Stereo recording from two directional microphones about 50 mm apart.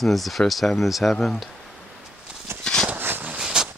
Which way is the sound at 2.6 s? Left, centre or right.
Centre.